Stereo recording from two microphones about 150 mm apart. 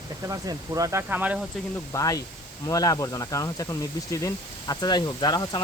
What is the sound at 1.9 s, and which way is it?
Speech, 20° left (ahead or behind).